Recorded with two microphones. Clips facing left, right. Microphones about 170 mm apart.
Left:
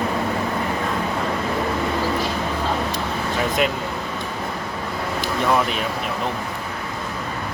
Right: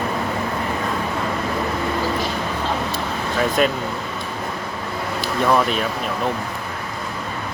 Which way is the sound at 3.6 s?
15° left (ahead or behind).